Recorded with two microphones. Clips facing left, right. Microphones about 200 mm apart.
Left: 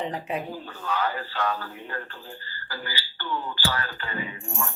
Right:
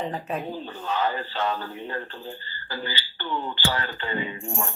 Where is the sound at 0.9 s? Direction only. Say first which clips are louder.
Right 1 dB; 25° right (ahead or behind).